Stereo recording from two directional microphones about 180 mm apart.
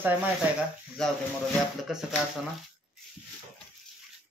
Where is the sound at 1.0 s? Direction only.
5° left (ahead or behind).